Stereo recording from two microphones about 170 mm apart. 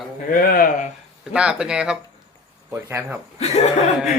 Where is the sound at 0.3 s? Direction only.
60° left (ahead or behind).